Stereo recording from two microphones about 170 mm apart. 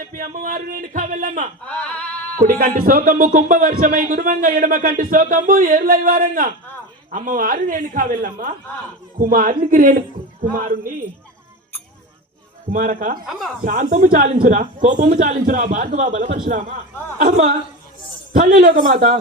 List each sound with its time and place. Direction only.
0.1 s a man's voice: 50° right (ahead or behind)
1.6 s a sound: 5° left (ahead or behind)
2.4 s a man's voice: 55° right (ahead or behind)
12.7 s a man's voice: 50° right (ahead or behind)
13.2 s speech: centre (ahead or behind)
13.7 s a man's voice: 50° right (ahead or behind)